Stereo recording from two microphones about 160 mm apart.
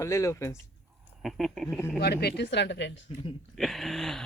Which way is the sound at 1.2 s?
Centre (ahead or behind).